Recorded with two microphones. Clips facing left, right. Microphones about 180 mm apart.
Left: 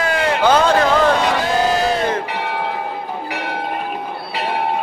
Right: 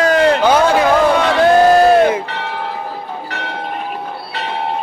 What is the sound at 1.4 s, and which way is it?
Crowd, 60° right (ahead or behind).